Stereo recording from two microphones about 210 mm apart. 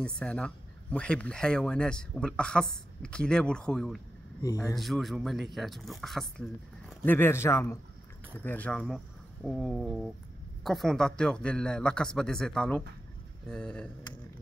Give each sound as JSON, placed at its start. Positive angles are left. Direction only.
{"t": 0.0, "sound": "speech", "side_deg": 5}
{"t": 4.4, "sound": "speech", "side_deg": 15}
{"t": 4.7, "sound": "speech", "side_deg": 0}